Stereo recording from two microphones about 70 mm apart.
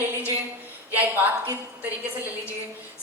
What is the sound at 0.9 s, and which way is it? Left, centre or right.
A woman's voice, right.